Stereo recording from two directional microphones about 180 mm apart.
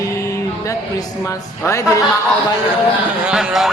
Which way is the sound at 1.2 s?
15° left (ahead or behind).